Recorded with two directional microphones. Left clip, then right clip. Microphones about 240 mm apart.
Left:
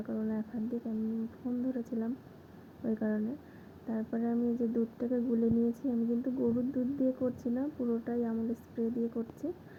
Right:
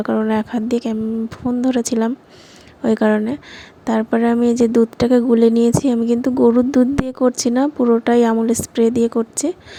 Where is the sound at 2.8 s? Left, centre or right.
Right.